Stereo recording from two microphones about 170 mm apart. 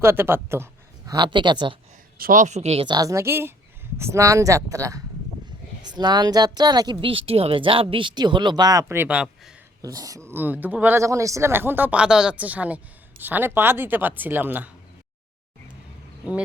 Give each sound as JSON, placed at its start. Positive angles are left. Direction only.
{"t": 0.0, "sound": "a man's voice", "side_deg": -15}
{"t": 2.1, "sound": "a woman's voice", "side_deg": -55}
{"t": 9.8, "sound": "speech", "side_deg": -20}